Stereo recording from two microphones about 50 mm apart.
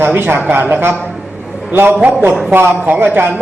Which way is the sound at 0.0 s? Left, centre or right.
Right.